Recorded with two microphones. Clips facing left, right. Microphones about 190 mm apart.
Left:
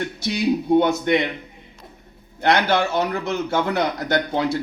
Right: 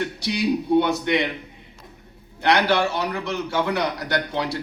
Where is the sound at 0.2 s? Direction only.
45° left (ahead or behind).